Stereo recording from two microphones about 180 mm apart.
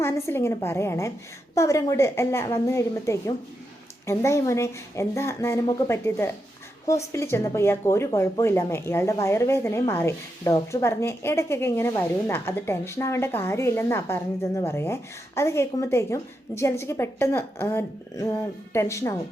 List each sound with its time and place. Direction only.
0.0 s speech: 15° left (ahead or behind)